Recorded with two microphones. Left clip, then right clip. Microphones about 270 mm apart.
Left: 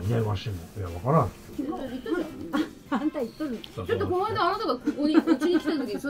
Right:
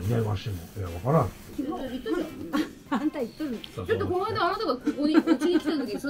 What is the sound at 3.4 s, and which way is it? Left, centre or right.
Speech, centre.